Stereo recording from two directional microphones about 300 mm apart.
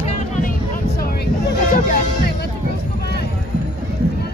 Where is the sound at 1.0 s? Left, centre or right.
Left.